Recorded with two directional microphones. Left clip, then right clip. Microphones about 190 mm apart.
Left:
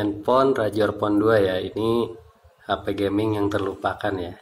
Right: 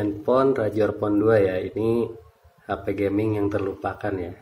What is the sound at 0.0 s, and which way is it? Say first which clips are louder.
Speech: left 1 dB; 20° right (ahead or behind).